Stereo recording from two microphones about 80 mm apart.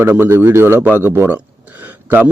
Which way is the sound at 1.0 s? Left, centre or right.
Right.